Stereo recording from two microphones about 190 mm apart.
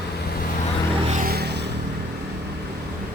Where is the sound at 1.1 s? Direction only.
50° right (ahead or behind).